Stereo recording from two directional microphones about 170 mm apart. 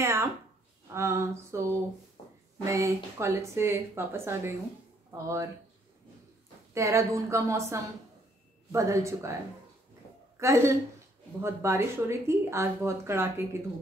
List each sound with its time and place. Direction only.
0.0 s a sound: 15° right (ahead or behind)
0.9 s speech: 15° right (ahead or behind)
2.2 s a sound: 35° left (ahead or behind)
2.6 s speech: 15° right (ahead or behind)
6.7 s speech: 15° right (ahead or behind)
10.4 s speech: 15° right (ahead or behind)